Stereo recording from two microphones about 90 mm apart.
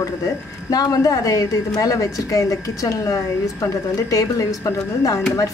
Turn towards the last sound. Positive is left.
turn(degrees=40)  # may be behind; listen again after turning